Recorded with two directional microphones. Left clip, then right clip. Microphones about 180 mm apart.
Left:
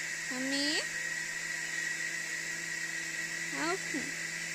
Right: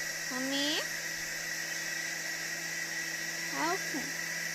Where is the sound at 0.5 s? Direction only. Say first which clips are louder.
Even; 40° right (ahead or behind).